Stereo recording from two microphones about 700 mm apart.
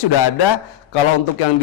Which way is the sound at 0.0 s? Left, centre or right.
Left.